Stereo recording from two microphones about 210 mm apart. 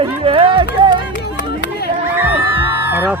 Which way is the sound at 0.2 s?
25° right (ahead or behind).